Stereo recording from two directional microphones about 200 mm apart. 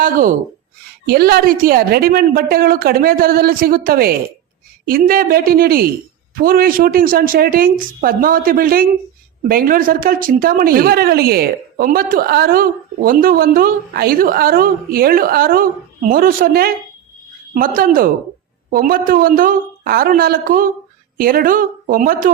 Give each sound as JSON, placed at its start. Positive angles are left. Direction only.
{"t": 0.0, "sound": "a woman's voice", "side_deg": -45}